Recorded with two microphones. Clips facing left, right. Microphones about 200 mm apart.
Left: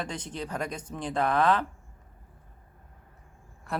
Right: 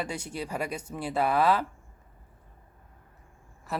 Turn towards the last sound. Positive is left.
turn(degrees=0)  # may be behind; listen again after turning